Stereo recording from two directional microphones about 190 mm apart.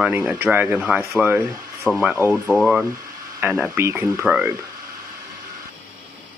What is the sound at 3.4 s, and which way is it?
Speech, 5° right (ahead or behind).